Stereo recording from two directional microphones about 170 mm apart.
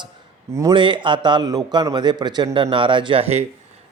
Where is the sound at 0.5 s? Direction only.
25° right (ahead or behind).